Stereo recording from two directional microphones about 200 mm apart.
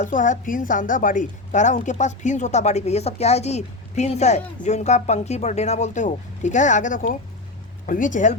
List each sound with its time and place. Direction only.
0.0 s a woman's voice: 40° left (ahead or behind)